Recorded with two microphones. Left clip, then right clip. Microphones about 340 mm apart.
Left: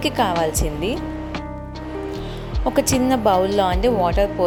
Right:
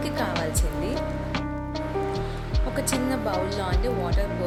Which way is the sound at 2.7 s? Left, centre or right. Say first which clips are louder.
Left 8 dB; left.